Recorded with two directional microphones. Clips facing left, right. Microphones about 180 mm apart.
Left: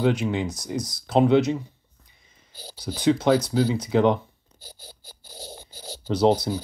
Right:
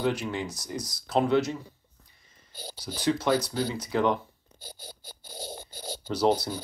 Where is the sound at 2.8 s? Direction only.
20° left (ahead or behind).